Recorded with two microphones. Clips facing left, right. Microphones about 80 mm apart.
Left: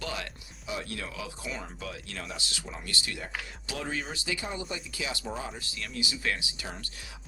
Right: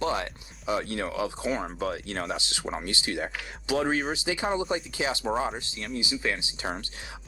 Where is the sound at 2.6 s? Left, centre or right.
Right.